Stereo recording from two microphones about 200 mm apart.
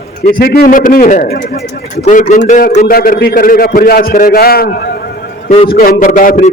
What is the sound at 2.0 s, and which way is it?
A man's voice, 35° left (ahead or behind).